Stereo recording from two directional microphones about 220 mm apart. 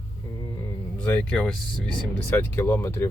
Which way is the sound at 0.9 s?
5° left (ahead or behind).